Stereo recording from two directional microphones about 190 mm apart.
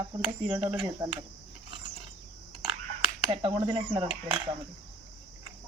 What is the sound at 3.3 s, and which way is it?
Speech, 25° right (ahead or behind).